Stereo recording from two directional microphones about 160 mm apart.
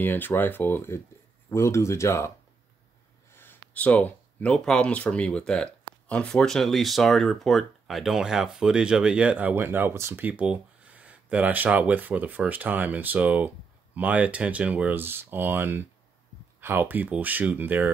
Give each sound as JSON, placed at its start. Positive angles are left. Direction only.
{"t": 0.0, "sound": "speech", "side_deg": 10}